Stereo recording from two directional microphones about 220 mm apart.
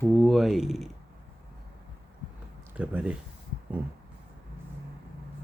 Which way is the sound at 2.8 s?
5° right (ahead or behind).